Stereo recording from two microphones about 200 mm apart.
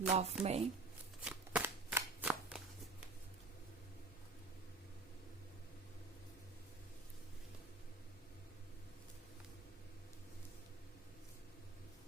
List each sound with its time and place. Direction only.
0.1 s speech: 30° right (ahead or behind)
1.2 s shuffling cards: 5° right (ahead or behind)